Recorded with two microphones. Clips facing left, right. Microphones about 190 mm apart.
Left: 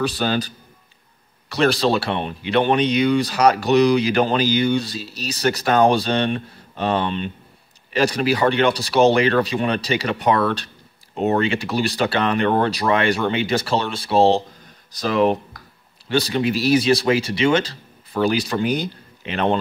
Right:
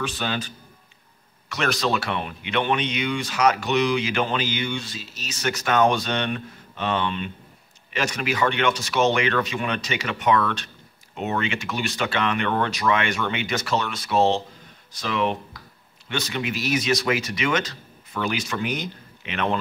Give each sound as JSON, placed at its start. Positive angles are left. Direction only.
{"t": 0.0, "sound": "speech", "side_deg": 40}
{"t": 1.5, "sound": "speech", "side_deg": 30}